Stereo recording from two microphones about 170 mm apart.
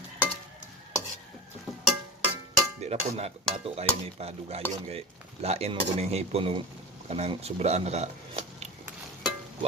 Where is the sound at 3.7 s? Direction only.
35° right (ahead or behind).